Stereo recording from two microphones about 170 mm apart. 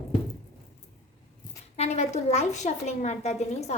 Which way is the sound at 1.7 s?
40° left (ahead or behind).